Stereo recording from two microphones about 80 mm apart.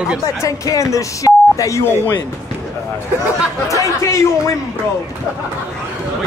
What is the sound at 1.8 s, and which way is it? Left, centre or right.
Speech, left.